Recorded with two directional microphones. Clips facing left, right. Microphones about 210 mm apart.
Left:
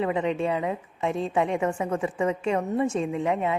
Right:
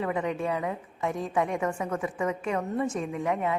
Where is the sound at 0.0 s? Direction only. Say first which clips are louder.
Left 4 dB; 20° left (ahead or behind).